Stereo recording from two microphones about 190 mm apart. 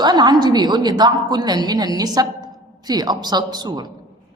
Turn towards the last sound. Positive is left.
turn(degrees=-20)  # may be behind; listen again after turning